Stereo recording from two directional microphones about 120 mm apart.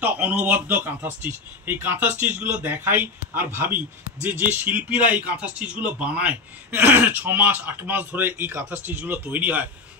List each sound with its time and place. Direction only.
0.0 s speech: 15° right (ahead or behind)